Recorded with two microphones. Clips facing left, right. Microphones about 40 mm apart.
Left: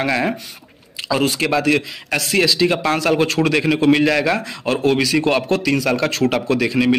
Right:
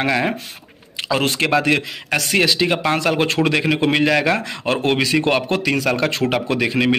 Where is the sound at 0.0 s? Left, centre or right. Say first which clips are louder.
Even; centre.